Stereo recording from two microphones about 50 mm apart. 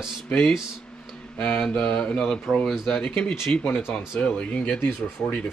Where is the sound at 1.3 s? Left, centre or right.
Left.